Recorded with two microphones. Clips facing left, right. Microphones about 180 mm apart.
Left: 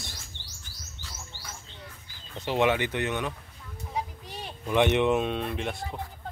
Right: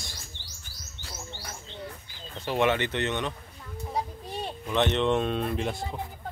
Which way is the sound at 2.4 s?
15° left (ahead or behind).